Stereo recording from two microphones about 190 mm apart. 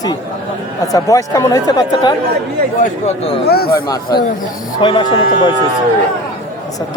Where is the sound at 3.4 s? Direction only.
55° left (ahead or behind).